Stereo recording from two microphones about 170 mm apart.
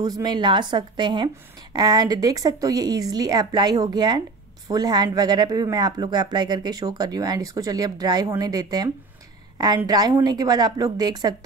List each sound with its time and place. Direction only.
0.0 s speech: 25° right (ahead or behind)